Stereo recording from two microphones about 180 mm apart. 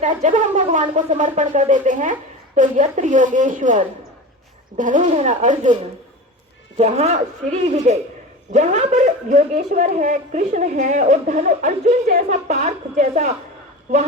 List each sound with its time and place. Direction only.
0.0 s speech: 45° right (ahead or behind)
6.7 s a woman's voice: 35° right (ahead or behind)